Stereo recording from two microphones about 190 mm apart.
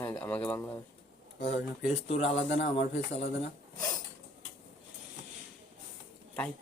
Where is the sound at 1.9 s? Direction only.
35° left (ahead or behind).